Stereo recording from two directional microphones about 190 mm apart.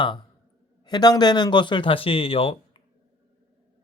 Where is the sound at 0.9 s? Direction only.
20° left (ahead or behind).